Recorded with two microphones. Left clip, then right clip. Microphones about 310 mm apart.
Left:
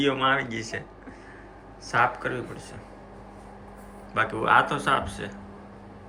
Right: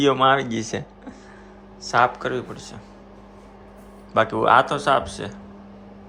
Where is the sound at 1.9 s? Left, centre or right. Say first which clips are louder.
Right 4 dB; centre.